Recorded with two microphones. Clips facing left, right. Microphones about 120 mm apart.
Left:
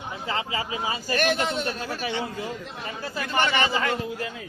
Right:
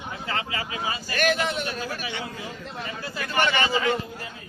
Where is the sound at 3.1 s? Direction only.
25° left (ahead or behind).